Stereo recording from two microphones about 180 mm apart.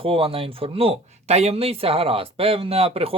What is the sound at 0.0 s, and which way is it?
Speech, 30° right (ahead or behind).